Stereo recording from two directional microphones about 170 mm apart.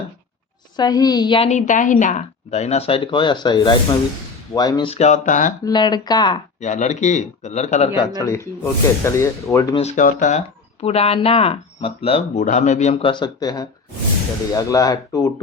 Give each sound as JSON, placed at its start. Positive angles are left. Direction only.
{"t": 0.8, "sound": "speech", "side_deg": 20}
{"t": 1.5, "sound": "speech", "side_deg": 45}
{"t": 4.9, "sound": "a man's voice", "side_deg": 40}
{"t": 5.6, "sound": "speech", "side_deg": 25}
{"t": 6.6, "sound": "a man's voice", "side_deg": 45}
{"t": 8.2, "sound": "speech", "side_deg": 15}
{"t": 9.7, "sound": "speech", "side_deg": 45}